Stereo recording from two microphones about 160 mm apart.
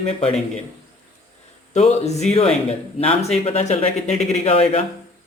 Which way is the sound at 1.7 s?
45° left (ahead or behind).